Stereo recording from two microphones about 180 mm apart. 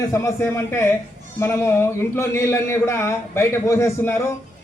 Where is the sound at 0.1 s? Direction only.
15° left (ahead or behind).